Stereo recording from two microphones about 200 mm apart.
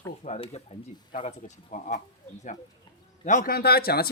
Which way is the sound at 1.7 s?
40° left (ahead or behind).